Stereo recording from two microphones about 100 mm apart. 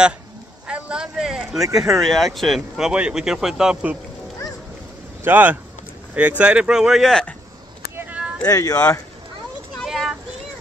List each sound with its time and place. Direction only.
0.7 s a sound: 10° right (ahead or behind)
1.6 s speech: 35° right (ahead or behind)
1.9 s speech: centre (ahead or behind)
5.2 s speech: 20° right (ahead or behind); by 7.2 s centre (ahead or behind)
7.9 s a sound: 15° right (ahead or behind)
8.5 s speech: 35° left (ahead or behind)
9.8 s child singing: 5° right (ahead or behind)